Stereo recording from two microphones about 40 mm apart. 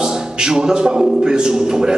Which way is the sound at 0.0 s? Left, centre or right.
Centre.